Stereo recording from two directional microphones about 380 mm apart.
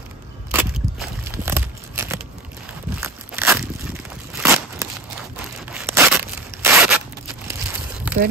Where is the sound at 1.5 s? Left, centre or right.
Centre.